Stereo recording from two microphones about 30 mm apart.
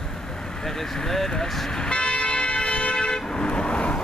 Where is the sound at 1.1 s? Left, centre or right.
Centre.